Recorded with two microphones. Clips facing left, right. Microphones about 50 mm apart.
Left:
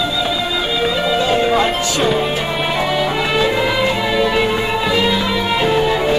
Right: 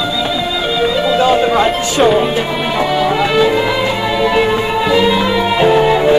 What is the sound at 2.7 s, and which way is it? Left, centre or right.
Music, centre.